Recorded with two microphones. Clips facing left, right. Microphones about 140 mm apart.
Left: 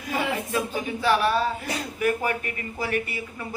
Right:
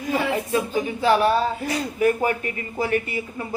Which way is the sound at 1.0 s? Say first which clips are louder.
Right 3 dB; 30° right (ahead or behind).